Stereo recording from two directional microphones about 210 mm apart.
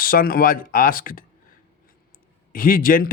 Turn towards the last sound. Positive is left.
turn(degrees=45)  # may be behind; listen again after turning